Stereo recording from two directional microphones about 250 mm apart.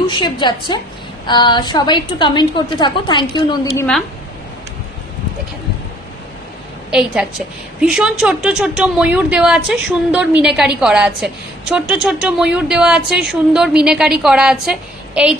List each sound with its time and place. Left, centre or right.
0.0 s a woman's voice: centre
3.7 s a woman's voice: centre
6.9 s a woman's voice: centre